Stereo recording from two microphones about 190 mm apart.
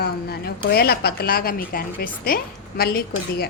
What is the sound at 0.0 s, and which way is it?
A woman's voice, 55° left (ahead or behind).